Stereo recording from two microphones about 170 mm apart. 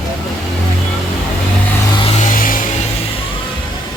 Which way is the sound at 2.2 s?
50° left (ahead or behind).